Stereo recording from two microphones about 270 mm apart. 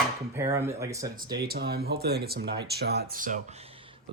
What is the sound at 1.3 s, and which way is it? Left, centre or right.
Speech, right.